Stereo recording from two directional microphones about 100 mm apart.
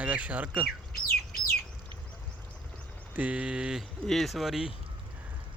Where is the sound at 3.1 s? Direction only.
15° right (ahead or behind).